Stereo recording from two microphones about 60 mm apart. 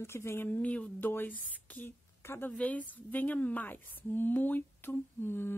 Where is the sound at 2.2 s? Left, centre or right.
Left.